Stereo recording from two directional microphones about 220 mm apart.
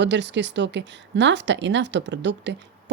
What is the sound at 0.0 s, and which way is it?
A woman's voice, 50° right (ahead or behind).